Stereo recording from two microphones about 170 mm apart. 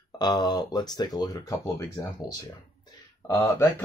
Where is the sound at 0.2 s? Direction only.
25° left (ahead or behind).